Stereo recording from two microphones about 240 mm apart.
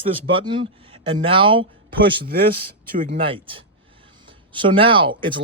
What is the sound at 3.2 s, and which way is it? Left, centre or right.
Speech, right.